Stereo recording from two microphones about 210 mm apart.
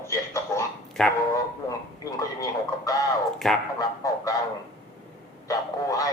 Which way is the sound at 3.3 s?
Centre (ahead or behind).